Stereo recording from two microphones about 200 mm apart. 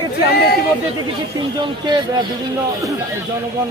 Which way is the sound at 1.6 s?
20° right (ahead or behind).